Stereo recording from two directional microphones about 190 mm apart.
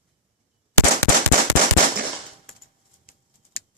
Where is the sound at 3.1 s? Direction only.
50° left (ahead or behind).